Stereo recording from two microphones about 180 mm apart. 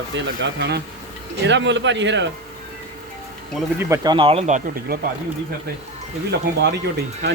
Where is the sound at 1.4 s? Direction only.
85° right.